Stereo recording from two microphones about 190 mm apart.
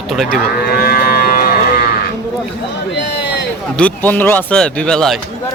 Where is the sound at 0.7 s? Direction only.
55° left (ahead or behind).